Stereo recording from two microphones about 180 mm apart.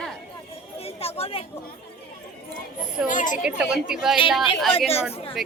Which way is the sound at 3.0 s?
45° left (ahead or behind).